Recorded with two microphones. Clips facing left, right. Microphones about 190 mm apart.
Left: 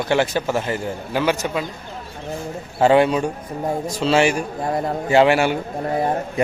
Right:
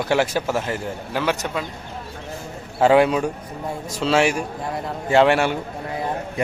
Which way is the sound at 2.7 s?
Centre (ahead or behind).